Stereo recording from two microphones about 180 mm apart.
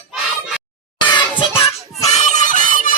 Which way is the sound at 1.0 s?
25° left (ahead or behind).